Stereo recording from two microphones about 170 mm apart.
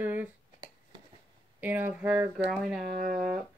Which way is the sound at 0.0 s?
10° right (ahead or behind).